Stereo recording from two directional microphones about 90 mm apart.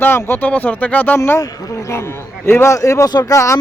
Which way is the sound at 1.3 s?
40° left (ahead or behind).